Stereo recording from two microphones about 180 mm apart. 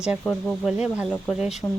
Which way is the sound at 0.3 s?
5° left (ahead or behind).